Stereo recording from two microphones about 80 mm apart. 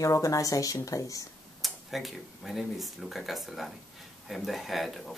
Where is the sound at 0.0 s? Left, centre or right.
Left.